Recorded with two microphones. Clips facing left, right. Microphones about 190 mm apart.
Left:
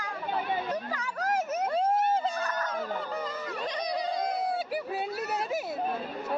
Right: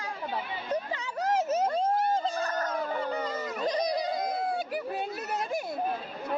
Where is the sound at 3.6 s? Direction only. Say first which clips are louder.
Right 4 dB; 40° right (ahead or behind).